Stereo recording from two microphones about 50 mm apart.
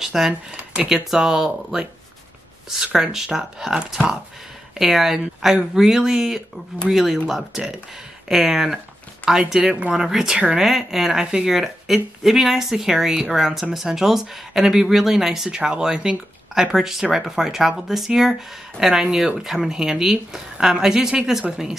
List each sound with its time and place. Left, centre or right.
0.0 s a sound: centre
0.3 s speech: right
0.7 s speech: centre